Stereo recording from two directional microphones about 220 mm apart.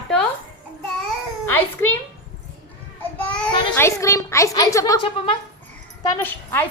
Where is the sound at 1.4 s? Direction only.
10° left (ahead or behind).